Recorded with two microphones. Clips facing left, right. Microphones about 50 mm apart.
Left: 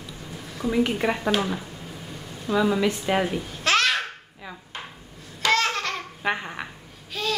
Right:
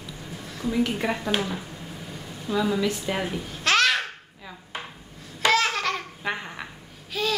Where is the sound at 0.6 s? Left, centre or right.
Centre.